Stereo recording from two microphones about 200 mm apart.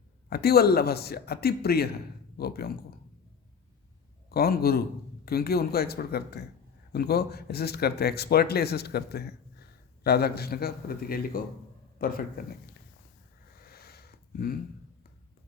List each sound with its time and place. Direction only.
0.3 s speech: 50° left (ahead or behind)
4.3 s speech: 50° left (ahead or behind)
13.6 s a sound: 50° left (ahead or behind)